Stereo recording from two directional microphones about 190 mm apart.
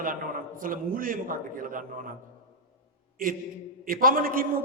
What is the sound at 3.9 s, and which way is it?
Speech, 50° right (ahead or behind).